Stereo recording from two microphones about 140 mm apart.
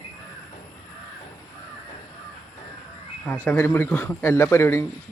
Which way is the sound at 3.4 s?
15° left (ahead or behind).